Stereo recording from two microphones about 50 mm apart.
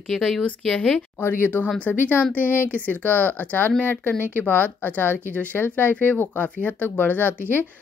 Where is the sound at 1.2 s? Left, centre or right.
Left.